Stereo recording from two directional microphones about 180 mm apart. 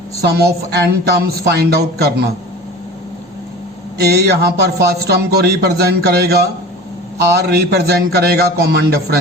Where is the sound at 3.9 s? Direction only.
65° right (ahead or behind).